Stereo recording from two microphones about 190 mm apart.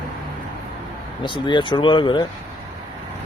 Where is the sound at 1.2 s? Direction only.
25° left (ahead or behind).